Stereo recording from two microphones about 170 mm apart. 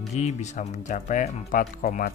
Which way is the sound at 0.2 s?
45° left (ahead or behind).